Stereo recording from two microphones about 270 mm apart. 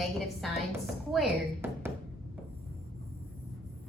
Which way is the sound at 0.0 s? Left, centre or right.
Centre.